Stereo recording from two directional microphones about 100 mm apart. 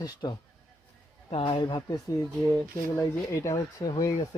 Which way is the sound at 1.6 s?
50° left (ahead or behind).